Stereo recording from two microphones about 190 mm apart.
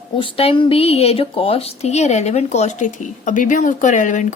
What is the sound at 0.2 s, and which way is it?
Speech, 30° left (ahead or behind).